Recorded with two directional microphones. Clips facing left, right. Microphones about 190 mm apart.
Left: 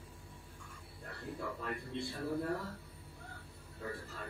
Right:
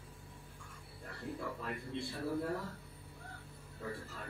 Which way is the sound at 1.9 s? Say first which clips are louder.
Left 1 dB; centre (ahead or behind).